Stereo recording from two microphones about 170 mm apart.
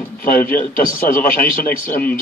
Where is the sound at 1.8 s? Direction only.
10° left (ahead or behind).